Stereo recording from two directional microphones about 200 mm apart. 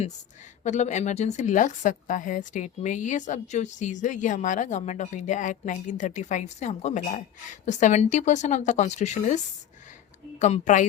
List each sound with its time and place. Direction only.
0.6 s a woman's voice: 35° left (ahead or behind)
10.4 s a woman's voice: 35° left (ahead or behind)